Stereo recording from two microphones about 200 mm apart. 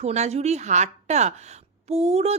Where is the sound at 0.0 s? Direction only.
35° right (ahead or behind).